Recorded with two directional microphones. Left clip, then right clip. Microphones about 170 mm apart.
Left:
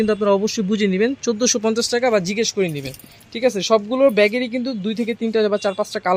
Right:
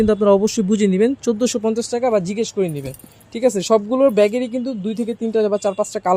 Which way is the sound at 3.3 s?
30° right (ahead or behind).